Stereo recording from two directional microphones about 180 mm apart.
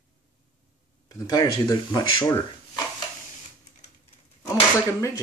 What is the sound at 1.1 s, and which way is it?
Speech, 20° left (ahead or behind).